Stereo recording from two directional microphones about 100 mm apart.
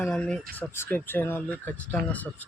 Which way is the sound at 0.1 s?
10° left (ahead or behind).